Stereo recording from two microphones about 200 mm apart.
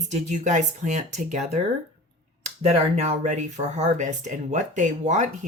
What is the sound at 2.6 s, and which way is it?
Speech, 30° right (ahead or behind).